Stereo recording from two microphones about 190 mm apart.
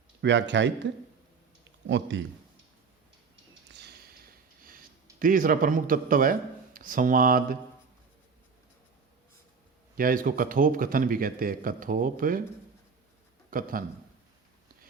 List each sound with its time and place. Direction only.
0.2 s a man's voice: 70° right (ahead or behind)
1.9 s a man's voice: 75° right (ahead or behind)
5.2 s a man's voice: 45° right (ahead or behind)
10.0 s a man's voice: 50° right (ahead or behind)
13.5 s a man's voice: 45° right (ahead or behind)